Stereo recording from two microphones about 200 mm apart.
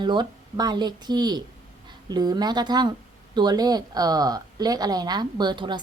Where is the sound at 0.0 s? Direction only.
20° right (ahead or behind).